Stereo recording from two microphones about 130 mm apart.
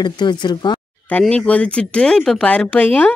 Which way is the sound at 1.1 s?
10° left (ahead or behind).